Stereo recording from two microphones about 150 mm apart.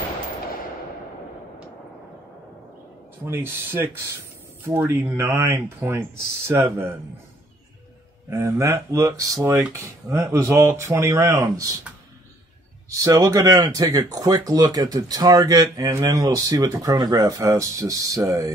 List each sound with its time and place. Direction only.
3.3 s speech: 15° right (ahead or behind)
8.3 s speech: 20° right (ahead or behind)
12.9 s speech: 20° right (ahead or behind)